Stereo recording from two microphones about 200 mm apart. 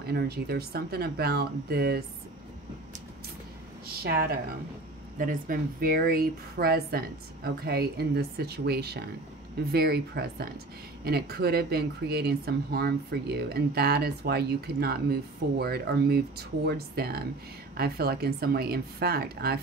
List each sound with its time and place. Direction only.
0.0 s speech: 50° right (ahead or behind)
3.8 s speech: 50° right (ahead or behind)